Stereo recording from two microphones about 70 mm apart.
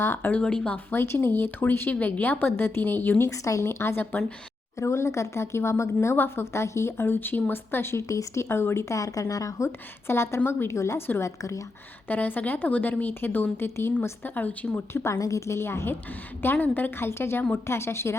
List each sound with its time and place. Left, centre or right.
0.0 s a woman's voice: left
0.3 s speech: centre
0.9 s a woman's voice: left
3.2 s a woman's voice: left
10.1 s a woman's voice: left
12.0 s a woman's voice: left
13.7 s a woman's voice: left
14.3 s a woman's voice: left
14.9 s a woman's voice: left